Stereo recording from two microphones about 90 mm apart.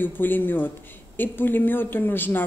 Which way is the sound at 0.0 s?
20° left (ahead or behind).